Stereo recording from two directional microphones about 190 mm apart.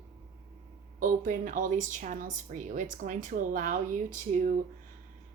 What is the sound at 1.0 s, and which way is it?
Speech, 45° right (ahead or behind).